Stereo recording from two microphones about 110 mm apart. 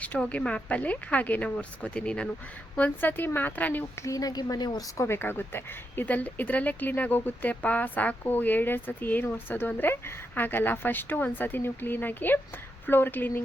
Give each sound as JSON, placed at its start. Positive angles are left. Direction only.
{"t": 0.0, "sound": "speech", "side_deg": 15}
{"t": 4.0, "sound": "a woman's voice", "side_deg": 35}
{"t": 4.9, "sound": "speech", "side_deg": 25}